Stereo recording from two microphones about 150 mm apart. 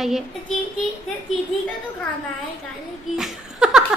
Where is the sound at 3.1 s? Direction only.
Centre (ahead or behind).